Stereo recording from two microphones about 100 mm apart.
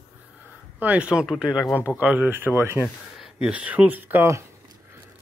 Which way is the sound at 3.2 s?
10° right (ahead or behind).